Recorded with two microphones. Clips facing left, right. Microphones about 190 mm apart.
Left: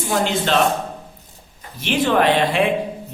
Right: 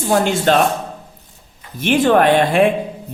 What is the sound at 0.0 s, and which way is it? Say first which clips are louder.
Speech: right 5 dB; 50° right (ahead or behind).